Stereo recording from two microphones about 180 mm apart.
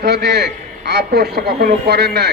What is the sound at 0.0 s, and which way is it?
A man's voice, 65° right (ahead or behind).